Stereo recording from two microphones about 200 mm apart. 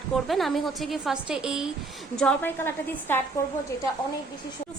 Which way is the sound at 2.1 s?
5° left (ahead or behind).